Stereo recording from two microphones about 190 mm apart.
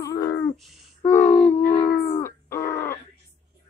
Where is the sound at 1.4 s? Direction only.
10° left (ahead or behind).